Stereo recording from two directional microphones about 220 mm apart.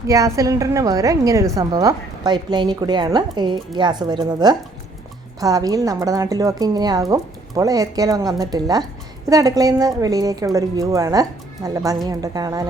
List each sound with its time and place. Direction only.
0.1 s a woman's voice: 15° right (ahead or behind)